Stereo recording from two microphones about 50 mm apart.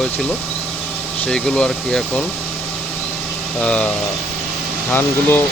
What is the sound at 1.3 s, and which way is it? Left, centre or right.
Speech, centre.